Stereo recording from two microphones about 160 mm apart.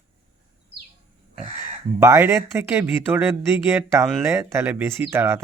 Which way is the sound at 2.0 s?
15° right (ahead or behind).